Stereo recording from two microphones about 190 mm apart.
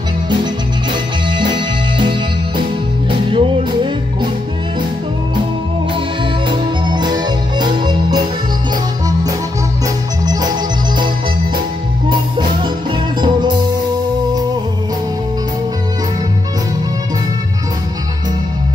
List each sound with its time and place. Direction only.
1.3 s music: 25° right (ahead or behind)
6.5 s music: 25° right (ahead or behind)
10.2 s music: 20° right (ahead or behind)
12.1 s music: 25° right (ahead or behind)